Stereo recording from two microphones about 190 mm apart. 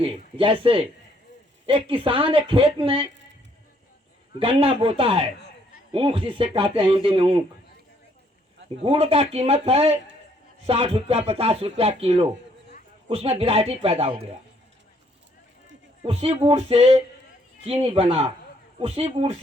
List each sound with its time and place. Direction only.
0.0 s speech: 30° right (ahead or behind)
4.4 s speech: 30° right (ahead or behind)
8.8 s speech: 30° right (ahead or behind)
16.0 s speech: 35° right (ahead or behind)